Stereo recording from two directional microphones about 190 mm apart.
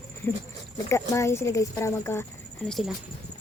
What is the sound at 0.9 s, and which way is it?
Speech, 15° left (ahead or behind).